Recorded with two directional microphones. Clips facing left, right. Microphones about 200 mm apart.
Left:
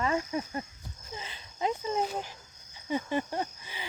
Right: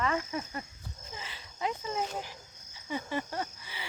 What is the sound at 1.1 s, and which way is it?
Cricket, 25° left (ahead or behind).